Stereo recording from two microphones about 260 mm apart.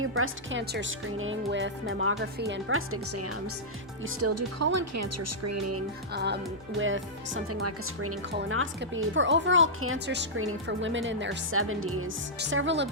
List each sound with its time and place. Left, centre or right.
0.0 s speech: right
6.1 s speech: right
8.3 s speech: right